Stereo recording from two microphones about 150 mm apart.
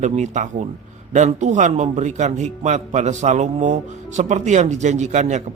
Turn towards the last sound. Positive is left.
turn(degrees=-50)  # may be behind; listen again after turning